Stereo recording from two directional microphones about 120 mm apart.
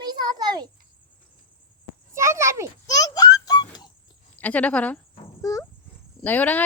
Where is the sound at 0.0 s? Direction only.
35° right (ahead or behind).